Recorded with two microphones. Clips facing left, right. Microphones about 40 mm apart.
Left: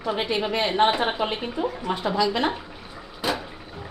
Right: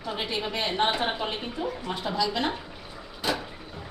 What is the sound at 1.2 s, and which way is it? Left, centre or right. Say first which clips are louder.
Speech: left 5 dB; left.